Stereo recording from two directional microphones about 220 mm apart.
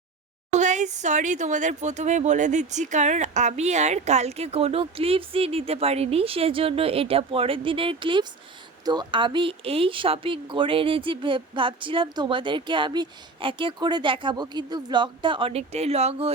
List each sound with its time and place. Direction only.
0.5 s speech: 35° right (ahead or behind)